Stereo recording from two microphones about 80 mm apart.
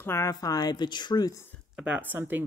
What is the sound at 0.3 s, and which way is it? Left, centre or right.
Speech, left.